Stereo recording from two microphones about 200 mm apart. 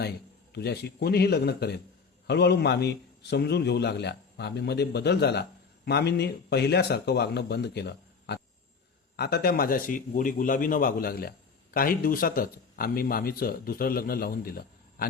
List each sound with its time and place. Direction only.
0.5 s a man's voice: 55° left (ahead or behind)